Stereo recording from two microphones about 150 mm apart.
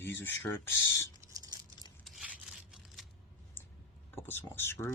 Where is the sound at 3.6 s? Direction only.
15° left (ahead or behind).